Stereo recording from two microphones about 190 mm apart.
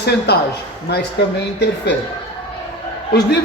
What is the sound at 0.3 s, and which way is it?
Speech, 60° left (ahead or behind).